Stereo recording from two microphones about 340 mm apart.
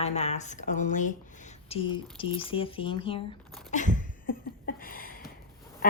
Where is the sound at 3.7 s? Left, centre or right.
Left.